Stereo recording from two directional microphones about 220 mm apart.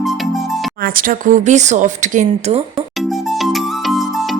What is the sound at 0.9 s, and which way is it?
Speech, 40° right (ahead or behind).